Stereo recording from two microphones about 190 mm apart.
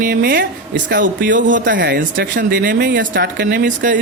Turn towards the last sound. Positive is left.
turn(degrees=-45)  # may be behind; listen again after turning